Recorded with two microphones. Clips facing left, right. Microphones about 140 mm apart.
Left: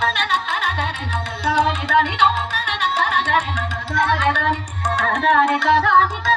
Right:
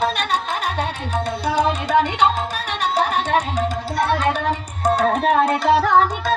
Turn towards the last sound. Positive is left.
turn(degrees=-35)  # may be behind; listen again after turning